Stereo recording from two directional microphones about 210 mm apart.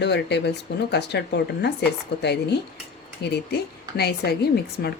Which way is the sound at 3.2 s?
50° left (ahead or behind).